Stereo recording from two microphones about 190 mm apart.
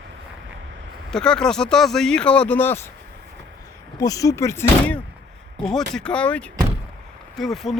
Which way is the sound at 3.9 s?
20° left (ahead or behind).